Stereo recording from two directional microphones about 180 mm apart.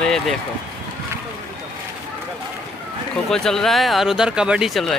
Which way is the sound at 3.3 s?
5° left (ahead or behind).